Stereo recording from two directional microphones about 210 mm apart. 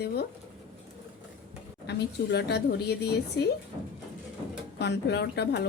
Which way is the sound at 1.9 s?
50° left (ahead or behind).